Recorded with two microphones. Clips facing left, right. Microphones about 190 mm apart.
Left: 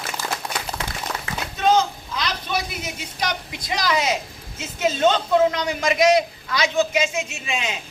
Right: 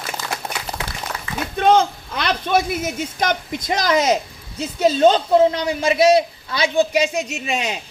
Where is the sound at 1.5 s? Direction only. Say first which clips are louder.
Right 4 dB; 55° right (ahead or behind).